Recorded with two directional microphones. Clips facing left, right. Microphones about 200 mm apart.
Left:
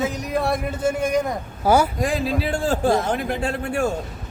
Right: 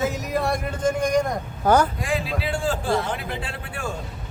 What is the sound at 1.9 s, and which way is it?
A man's voice, 40° left (ahead or behind).